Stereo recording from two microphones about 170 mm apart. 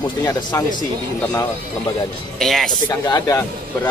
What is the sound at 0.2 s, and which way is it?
Speech, 25° left (ahead or behind).